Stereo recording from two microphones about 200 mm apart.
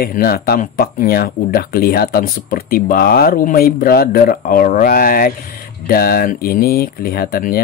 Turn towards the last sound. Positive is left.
turn(degrees=50)  # may be behind; listen again after turning